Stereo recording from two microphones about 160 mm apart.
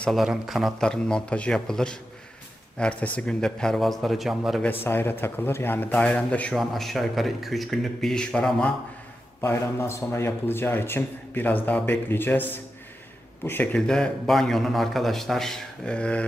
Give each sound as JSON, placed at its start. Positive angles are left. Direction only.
{"t": 0.0, "sound": "a man's voice", "side_deg": 0}
{"t": 4.8, "sound": "a man's voice", "side_deg": 15}
{"t": 9.4, "sound": "a man's voice", "side_deg": 15}